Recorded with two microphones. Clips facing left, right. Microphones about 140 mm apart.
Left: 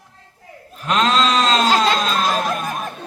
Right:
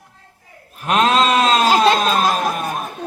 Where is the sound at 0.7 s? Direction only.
55° right (ahead or behind).